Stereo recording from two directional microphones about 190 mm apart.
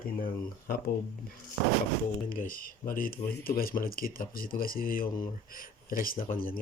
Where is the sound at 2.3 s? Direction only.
45° left (ahead or behind).